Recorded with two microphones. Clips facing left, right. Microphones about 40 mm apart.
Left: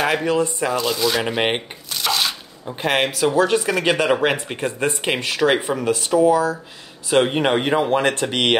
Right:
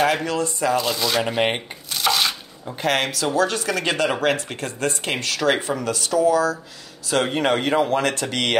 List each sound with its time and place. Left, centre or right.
0.2 s speech: left
0.7 s speech: centre
1.2 s speech: centre
1.9 s a sound: centre
2.8 s speech: left